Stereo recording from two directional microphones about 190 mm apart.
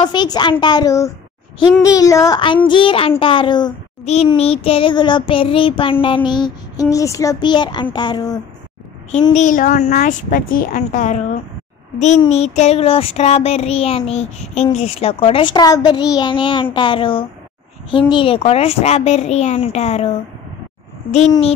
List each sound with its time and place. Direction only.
0.0 s child singing: 20° left (ahead or behind)
4.0 s child singing: 35° left (ahead or behind)
9.3 s child singing: 40° left (ahead or behind)